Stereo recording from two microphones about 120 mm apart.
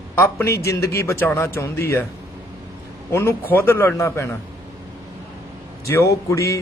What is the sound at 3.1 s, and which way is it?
A man's voice, 20° left (ahead or behind).